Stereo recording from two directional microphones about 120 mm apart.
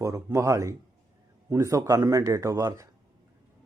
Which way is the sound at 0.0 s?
25° right (ahead or behind).